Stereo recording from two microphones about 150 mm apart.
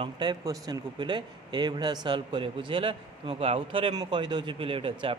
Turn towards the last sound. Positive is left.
turn(degrees=-35)  # may be behind; listen again after turning